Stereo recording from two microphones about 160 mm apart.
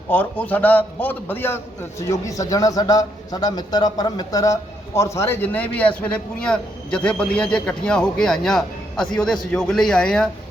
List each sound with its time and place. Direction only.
0.1 s a man's voice: 10° left (ahead or behind)